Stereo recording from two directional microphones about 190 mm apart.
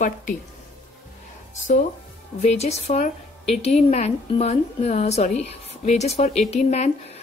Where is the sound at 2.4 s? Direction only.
35° left (ahead or behind).